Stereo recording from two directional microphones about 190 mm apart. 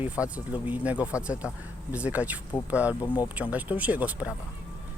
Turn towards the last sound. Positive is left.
turn(degrees=-10)  # may be behind; listen again after turning